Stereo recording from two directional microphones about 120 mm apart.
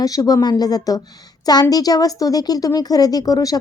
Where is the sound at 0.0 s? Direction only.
30° left (ahead or behind).